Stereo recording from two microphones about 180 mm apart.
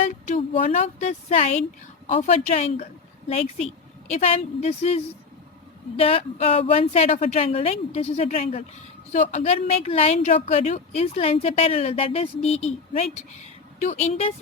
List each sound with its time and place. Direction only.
0.0 s speech: 35° left (ahead or behind)